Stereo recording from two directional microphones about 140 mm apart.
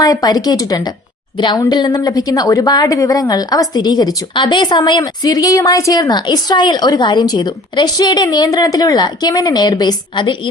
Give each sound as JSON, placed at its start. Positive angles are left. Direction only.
{"t": 0.0, "sound": "a woman's voice", "side_deg": 25}